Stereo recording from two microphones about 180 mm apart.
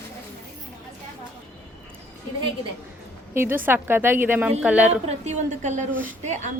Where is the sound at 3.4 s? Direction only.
10° right (ahead or behind).